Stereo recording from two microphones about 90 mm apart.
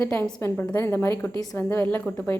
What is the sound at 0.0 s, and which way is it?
A woman's voice, 20° left (ahead or behind).